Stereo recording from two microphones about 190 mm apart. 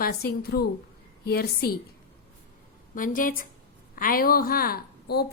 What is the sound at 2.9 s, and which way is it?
A woman's voice, 45° left (ahead or behind).